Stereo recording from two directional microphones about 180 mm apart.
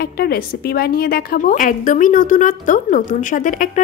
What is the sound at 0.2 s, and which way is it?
A woman's voice, 60° left (ahead or behind).